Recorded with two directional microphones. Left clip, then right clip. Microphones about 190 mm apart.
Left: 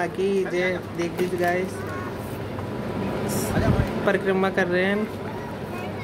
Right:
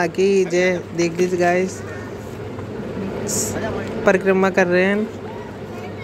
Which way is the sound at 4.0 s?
20° right (ahead or behind).